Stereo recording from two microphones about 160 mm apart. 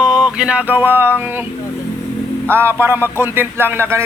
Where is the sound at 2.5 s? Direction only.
15° right (ahead or behind).